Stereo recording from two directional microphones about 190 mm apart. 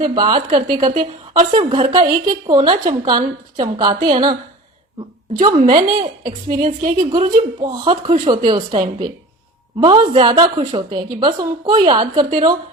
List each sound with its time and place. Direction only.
0.0 s speech: 25° right (ahead or behind)
1.0 s a woman's voice: 40° right (ahead or behind)
1.7 s speech: 25° right (ahead or behind)
5.4 s speech: 25° right (ahead or behind)
6.7 s a woman's voice: 45° right (ahead or behind)
7.1 s speech: 30° right (ahead or behind)